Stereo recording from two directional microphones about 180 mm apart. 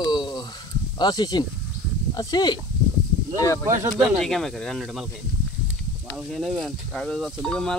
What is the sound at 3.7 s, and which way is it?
Speech, 15° right (ahead or behind).